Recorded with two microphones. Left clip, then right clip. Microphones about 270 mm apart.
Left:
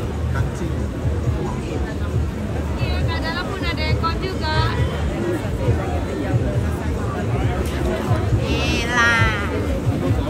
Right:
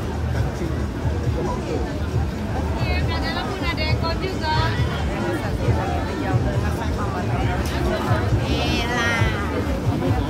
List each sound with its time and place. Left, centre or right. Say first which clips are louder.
8.5 s music: left 3 dB; centre